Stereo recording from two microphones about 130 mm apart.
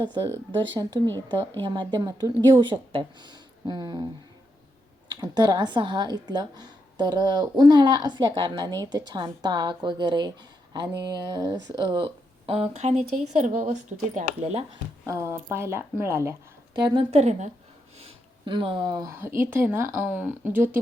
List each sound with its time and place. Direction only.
0.0 s a woman's voice: 35° right (ahead or behind)
5.2 s a woman's voice: 30° right (ahead or behind)
12.5 s speech: 50° right (ahead or behind)
15.0 s speech: 20° right (ahead or behind)
16.7 s a woman's voice: 35° right (ahead or behind)
17.1 s speech: 60° right (ahead or behind)
18.0 s speech: 40° right (ahead or behind)
19.4 s a woman's voice: 15° right (ahead or behind)